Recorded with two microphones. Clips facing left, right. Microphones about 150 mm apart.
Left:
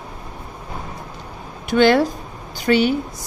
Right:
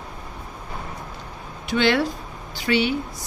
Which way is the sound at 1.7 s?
45° left (ahead or behind).